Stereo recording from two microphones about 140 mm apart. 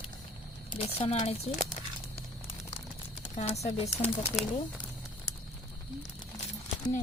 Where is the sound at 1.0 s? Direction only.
50° left (ahead or behind).